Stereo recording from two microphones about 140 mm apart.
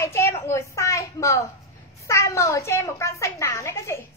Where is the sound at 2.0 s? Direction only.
20° left (ahead or behind).